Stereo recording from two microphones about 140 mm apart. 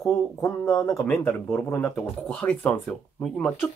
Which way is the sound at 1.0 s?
10° left (ahead or behind).